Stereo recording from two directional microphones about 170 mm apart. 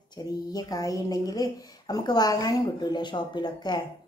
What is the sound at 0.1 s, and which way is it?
A woman's voice, 25° left (ahead or behind).